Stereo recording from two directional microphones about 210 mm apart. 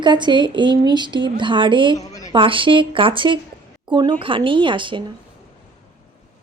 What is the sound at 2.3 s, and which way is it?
A woman's voice, 25° right (ahead or behind).